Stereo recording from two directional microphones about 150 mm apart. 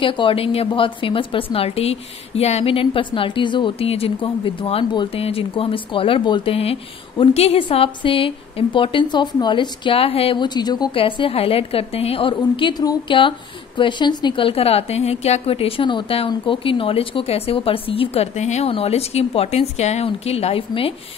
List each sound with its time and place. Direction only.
0.0 s a woman's voice: 35° left (ahead or behind)